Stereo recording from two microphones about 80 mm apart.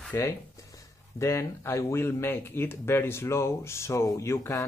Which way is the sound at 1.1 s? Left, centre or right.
Left.